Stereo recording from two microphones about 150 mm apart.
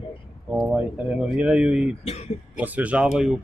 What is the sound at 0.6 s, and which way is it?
Speech, 5° right (ahead or behind).